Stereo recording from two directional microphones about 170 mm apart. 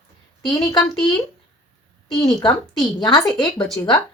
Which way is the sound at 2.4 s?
25° left (ahead or behind).